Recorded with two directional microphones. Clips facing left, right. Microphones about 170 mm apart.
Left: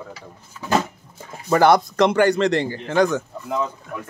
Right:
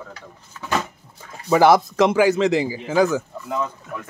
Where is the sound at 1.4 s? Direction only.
Centre (ahead or behind).